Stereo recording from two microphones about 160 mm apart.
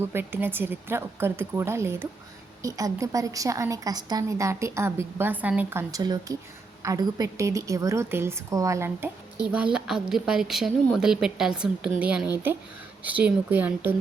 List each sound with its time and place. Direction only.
0.0 s a woman's voice: 15° right (ahead or behind)
5.9 s a woman's voice: 25° right (ahead or behind)